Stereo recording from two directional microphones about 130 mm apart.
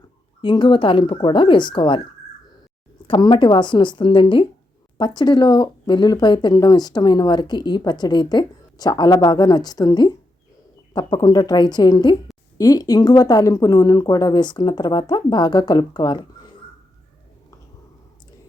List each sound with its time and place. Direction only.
0.4 s speech: 35° left (ahead or behind)
3.1 s speech: 35° left (ahead or behind)